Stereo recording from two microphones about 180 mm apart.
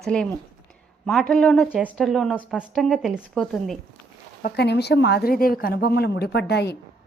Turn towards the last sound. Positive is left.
turn(degrees=65)  # may be behind; listen again after turning